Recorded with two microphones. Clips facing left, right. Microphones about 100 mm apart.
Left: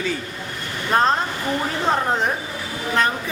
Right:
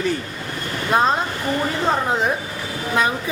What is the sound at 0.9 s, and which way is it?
A woman's voice, 5° right (ahead or behind).